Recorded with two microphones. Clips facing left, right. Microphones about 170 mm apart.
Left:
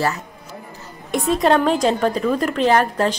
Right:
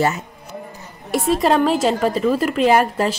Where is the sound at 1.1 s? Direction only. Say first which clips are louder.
Even; centre (ahead or behind).